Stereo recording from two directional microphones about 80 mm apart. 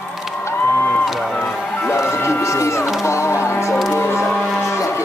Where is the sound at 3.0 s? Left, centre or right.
Left.